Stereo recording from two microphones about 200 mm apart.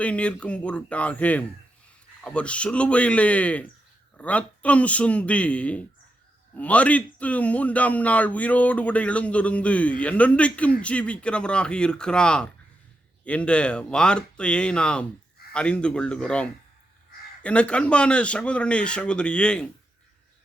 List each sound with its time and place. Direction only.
0.0 s speech: 5° left (ahead or behind)